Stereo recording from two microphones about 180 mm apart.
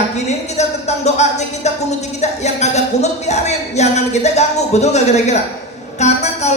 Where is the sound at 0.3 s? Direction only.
40° left (ahead or behind).